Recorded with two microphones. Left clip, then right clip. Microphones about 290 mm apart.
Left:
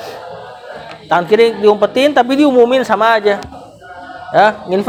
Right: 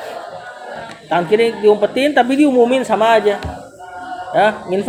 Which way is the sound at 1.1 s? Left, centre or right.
Left.